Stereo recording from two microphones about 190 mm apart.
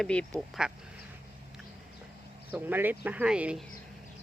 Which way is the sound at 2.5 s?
10° right (ahead or behind).